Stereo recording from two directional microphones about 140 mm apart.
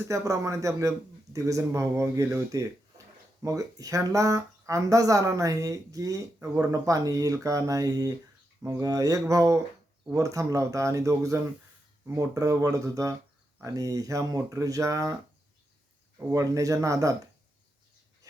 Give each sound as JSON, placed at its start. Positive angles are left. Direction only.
{"t": 0.1, "sound": "speech", "side_deg": -20}
{"t": 16.1, "sound": "speech", "side_deg": -25}